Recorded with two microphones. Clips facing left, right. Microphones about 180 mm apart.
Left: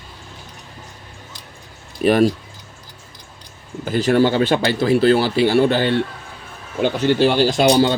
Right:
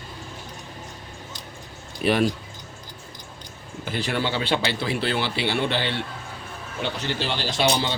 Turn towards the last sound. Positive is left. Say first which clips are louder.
# left 9 dB
turn(degrees=45)  # may be behind; listen again after turning